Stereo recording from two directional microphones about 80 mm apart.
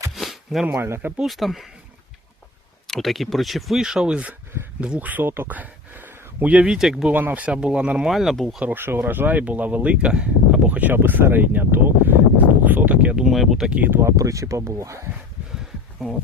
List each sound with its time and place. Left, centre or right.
0.1 s a sound: centre
0.7 s speech: right
1.1 s speech: centre
2.8 s speech: centre
6.7 s speech: centre
7.1 s speech: right
8.1 s speech: centre
8.6 s speech: right
13.2 s speech: centre
14.0 s speech: right
15.5 s a sound: centre